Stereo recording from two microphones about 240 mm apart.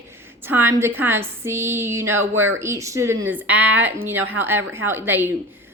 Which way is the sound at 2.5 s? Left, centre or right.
Centre.